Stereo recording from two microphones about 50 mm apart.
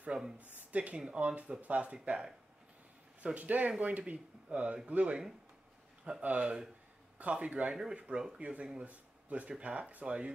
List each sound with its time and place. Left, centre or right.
0.0 s speech: centre
0.6 s speech: right
2.0 s speech: centre
3.3 s speech: right
6.2 s speech: right